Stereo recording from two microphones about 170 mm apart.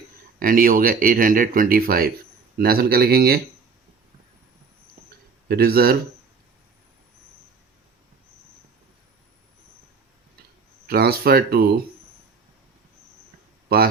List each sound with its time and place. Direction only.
0.3 s speech: 55° right (ahead or behind)
5.5 s speech: 65° right (ahead or behind)
10.8 s speech: 65° right (ahead or behind)
13.7 s speech: 65° right (ahead or behind)